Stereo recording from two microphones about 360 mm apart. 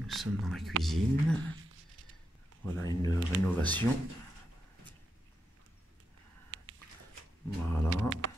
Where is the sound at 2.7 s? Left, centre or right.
Centre.